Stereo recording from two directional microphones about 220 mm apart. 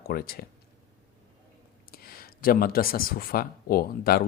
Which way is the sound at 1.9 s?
45° left (ahead or behind).